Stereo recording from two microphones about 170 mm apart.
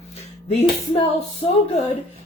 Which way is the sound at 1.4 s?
40° left (ahead or behind).